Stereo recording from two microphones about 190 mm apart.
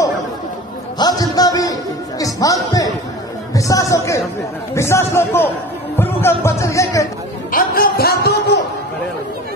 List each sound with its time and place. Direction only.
0.9 s a man's voice: 20° left (ahead or behind)
7.5 s music: 50° left (ahead or behind)